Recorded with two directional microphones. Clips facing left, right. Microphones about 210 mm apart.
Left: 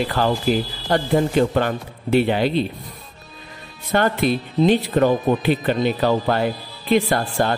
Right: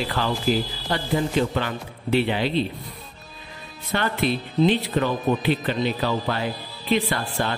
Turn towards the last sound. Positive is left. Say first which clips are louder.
# left 6 dB
turn(degrees=45)  # may be behind; listen again after turning